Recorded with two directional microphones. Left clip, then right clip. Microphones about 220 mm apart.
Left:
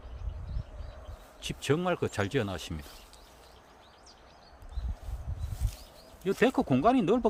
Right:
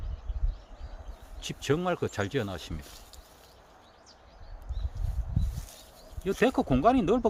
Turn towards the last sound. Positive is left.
turn(degrees=-10)  # may be behind; listen again after turning